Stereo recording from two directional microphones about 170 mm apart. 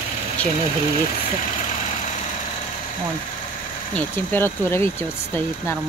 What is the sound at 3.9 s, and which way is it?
A woman's voice, 10° left (ahead or behind).